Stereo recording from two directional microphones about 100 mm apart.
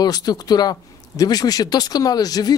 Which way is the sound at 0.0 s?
40° left (ahead or behind).